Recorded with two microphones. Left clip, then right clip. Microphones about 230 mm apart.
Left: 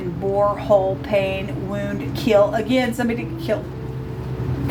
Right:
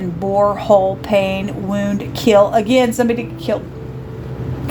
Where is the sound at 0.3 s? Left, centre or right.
Right.